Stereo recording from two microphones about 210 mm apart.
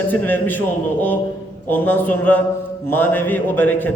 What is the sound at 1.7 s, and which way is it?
A man's voice, 10° left (ahead or behind).